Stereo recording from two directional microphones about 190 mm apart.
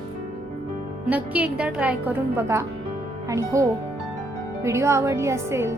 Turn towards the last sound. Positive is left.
turn(degrees=-15)  # may be behind; listen again after turning